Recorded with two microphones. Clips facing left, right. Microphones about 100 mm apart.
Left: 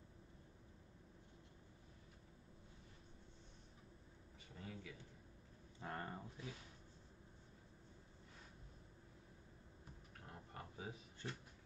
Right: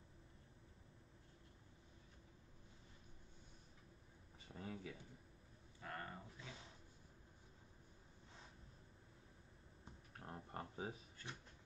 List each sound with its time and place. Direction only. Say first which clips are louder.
4.6 s a man's voice: right 3 dB; 35° right (ahead or behind)
5.8 s speech: left 3 dB; 25° left (ahead or behind)
10.2 s a sound: right 5 dB; 35° right (ahead or behind)